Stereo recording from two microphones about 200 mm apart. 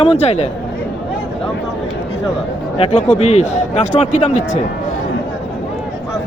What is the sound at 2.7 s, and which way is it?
Speech, 35° left (ahead or behind).